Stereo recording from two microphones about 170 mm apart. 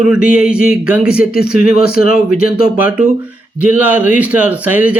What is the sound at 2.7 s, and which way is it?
Speech, 5° right (ahead or behind).